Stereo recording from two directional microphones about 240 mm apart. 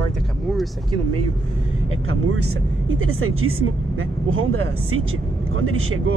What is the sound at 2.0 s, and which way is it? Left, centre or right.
Speech, right.